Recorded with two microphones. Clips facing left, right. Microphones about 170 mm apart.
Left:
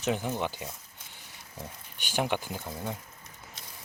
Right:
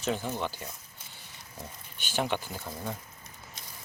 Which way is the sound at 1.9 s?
15° left (ahead or behind).